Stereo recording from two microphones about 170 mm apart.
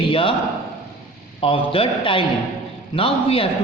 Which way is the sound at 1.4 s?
35° left (ahead or behind).